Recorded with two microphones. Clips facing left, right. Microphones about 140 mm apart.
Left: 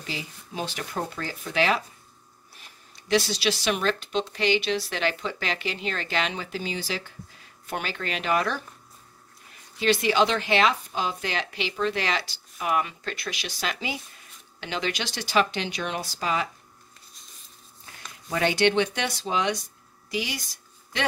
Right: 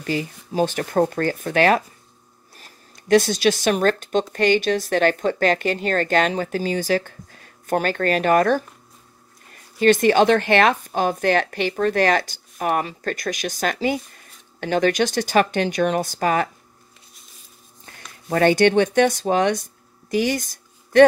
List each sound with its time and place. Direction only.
0.0 s speech: 50° right (ahead or behind)
18.3 s speech: 50° right (ahead or behind)